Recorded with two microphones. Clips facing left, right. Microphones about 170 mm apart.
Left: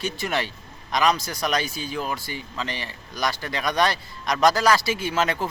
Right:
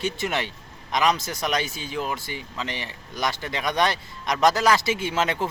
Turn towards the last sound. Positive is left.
turn(degrees=-20)  # may be behind; listen again after turning